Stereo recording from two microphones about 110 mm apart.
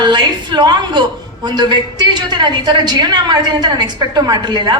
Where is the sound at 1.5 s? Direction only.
40° right (ahead or behind).